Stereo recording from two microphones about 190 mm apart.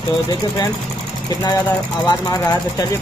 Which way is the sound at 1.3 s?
20° left (ahead or behind).